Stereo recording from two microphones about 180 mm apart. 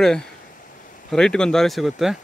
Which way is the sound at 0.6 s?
50° left (ahead or behind).